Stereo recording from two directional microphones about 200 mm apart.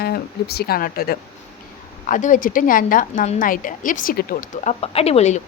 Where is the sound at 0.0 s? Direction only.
55° left (ahead or behind).